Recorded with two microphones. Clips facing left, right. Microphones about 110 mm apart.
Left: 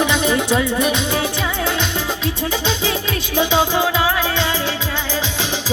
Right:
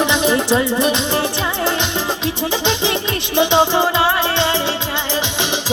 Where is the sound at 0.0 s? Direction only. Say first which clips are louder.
Right 1 dB; centre (ahead or behind).